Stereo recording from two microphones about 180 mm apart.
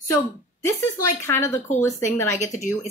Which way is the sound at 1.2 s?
15° left (ahead or behind).